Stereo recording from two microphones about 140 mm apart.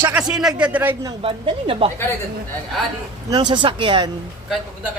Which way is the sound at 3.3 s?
30° right (ahead or behind).